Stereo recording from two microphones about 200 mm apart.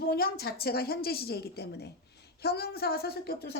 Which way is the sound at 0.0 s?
50° left (ahead or behind).